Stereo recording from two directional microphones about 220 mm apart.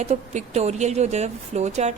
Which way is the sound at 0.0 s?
30° right (ahead or behind).